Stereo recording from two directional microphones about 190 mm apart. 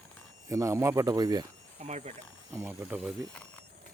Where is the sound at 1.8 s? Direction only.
35° right (ahead or behind).